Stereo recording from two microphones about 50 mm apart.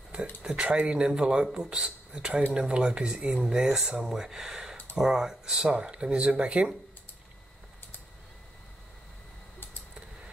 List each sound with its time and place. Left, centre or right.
0.4 s a man's voice: right